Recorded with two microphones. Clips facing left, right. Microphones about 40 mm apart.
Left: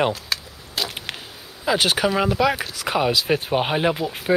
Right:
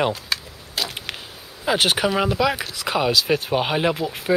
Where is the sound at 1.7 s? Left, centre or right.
Centre.